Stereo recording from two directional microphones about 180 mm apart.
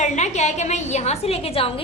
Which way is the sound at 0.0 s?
40° left (ahead or behind).